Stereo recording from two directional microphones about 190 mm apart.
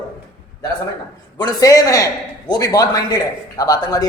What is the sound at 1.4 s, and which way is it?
A man's voice, 20° left (ahead or behind).